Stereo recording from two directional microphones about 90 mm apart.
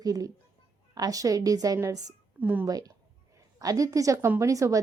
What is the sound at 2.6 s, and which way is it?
A woman's voice, 45° right (ahead or behind).